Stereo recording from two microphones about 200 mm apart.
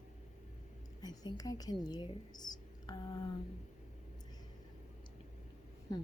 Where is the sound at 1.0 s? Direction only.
20° left (ahead or behind).